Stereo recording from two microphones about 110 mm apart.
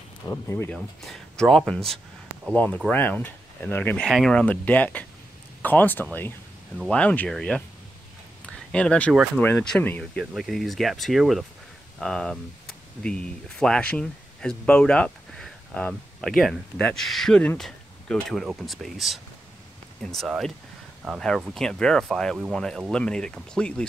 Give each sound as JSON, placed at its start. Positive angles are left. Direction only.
{"t": 0.3, "sound": "speech", "side_deg": 25}
{"t": 0.7, "sound": "speech", "side_deg": 0}
{"t": 2.5, "sound": "speech", "side_deg": 15}
{"t": 8.5, "sound": "a sound", "side_deg": 5}
{"t": 9.4, "sound": "speech", "side_deg": 15}
{"t": 10.3, "sound": "speech", "side_deg": 0}